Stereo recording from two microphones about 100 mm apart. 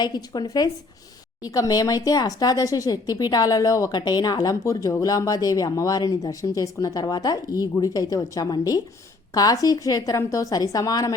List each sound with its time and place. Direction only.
0.0 s speech: 45° left (ahead or behind)